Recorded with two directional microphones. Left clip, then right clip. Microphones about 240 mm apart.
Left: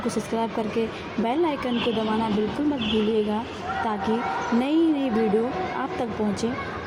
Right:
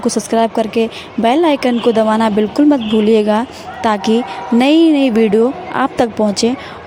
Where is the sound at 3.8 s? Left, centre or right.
Right.